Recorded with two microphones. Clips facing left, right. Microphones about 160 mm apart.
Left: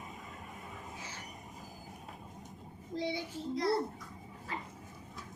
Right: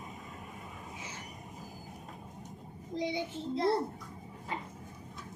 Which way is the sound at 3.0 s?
20° right (ahead or behind).